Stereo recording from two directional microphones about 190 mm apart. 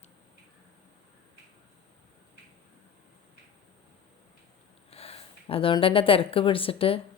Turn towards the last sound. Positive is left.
turn(degrees=30)  # may be behind; listen again after turning